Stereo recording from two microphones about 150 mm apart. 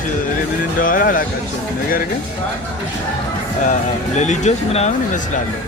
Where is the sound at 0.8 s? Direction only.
65° left (ahead or behind).